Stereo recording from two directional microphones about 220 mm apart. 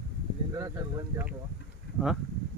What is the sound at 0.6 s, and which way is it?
Speech, 15° right (ahead or behind).